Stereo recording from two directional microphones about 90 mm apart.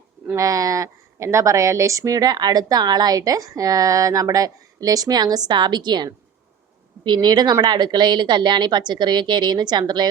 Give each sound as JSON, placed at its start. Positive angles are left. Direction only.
{"t": 0.3, "sound": "a woman's voice", "side_deg": -40}